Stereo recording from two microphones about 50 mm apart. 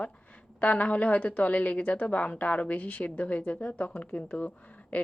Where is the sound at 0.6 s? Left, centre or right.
Left.